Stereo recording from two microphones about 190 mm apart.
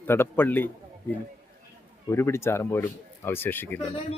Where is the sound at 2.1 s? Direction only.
15° left (ahead or behind).